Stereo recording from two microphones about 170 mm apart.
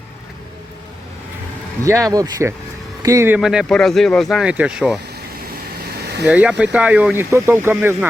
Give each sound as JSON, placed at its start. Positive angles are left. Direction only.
{"t": 1.8, "sound": "speech", "side_deg": -20}
{"t": 6.2, "sound": "speech", "side_deg": -5}